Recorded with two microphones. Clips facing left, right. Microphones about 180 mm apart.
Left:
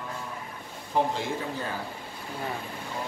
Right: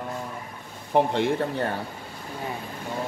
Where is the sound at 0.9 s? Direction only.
65° right (ahead or behind).